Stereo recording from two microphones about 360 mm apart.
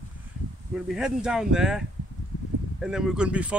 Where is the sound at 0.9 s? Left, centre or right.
Centre.